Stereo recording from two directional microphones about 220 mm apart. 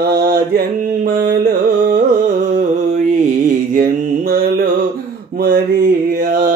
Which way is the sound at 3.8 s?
40° right (ahead or behind).